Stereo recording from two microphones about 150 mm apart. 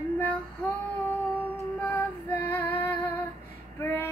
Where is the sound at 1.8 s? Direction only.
10° left (ahead or behind).